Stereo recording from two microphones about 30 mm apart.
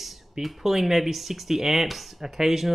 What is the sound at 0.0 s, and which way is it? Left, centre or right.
Speech, centre.